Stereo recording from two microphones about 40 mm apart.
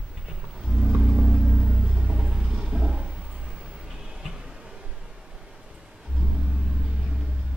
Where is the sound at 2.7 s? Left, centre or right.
Centre.